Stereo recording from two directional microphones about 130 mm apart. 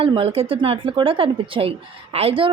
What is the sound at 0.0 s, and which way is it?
A woman's voice, 45° right (ahead or behind).